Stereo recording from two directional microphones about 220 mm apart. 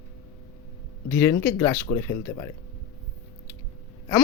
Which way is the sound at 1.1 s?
10° left (ahead or behind).